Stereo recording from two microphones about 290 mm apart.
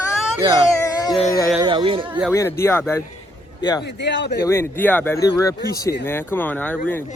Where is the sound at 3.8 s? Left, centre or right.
Left.